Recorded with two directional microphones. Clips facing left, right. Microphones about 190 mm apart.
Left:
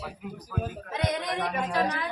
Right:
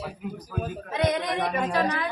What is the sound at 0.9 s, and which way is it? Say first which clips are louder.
A woman's voice: right 4 dB; 90° right.